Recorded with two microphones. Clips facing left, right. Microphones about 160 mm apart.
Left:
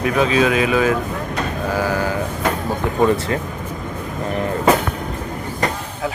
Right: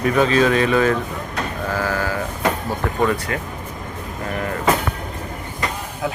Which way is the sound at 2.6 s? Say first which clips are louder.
Left 6 dB; 25° left (ahead or behind).